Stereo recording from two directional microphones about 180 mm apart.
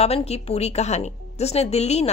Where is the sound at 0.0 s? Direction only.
35° left (ahead or behind).